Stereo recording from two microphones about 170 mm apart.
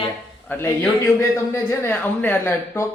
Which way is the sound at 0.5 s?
10° left (ahead or behind).